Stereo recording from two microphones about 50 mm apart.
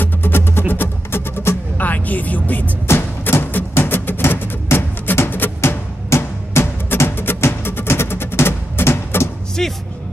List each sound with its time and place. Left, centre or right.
0.0 s music: left
1.8 s music: left
2.9 s music: left
5.6 s music: left
9.6 s music: centre